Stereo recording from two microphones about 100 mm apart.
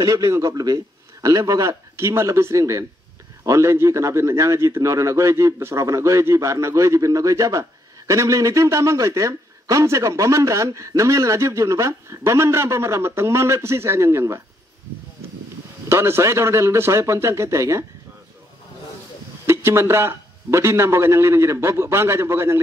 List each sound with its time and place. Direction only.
0.0 s a man's voice: 35° right (ahead or behind)
15.9 s speech: 25° right (ahead or behind)
19.4 s speech: 25° right (ahead or behind)